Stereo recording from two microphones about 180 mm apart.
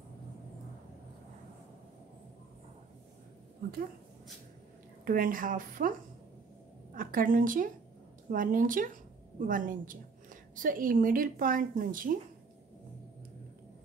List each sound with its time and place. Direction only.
5.0 s speech: 50° right (ahead or behind)
7.0 s a woman's voice: 50° right (ahead or behind)